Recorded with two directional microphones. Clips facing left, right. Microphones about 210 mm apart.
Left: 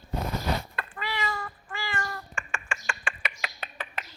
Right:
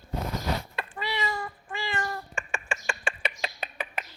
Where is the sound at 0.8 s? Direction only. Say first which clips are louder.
Right 2 dB; 20° right (ahead or behind).